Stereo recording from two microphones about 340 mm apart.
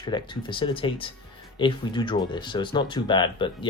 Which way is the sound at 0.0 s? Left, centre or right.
Centre.